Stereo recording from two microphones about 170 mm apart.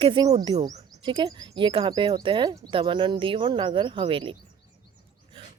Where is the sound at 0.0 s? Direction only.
25° right (ahead or behind).